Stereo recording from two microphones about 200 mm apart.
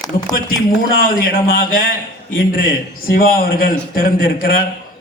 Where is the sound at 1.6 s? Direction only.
45° left (ahead or behind).